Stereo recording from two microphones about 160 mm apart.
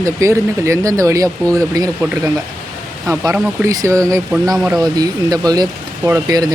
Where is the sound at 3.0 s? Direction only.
20° right (ahead or behind).